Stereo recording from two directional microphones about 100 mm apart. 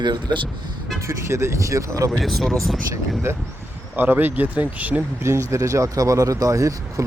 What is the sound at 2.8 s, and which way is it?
Speech, 25° right (ahead or behind).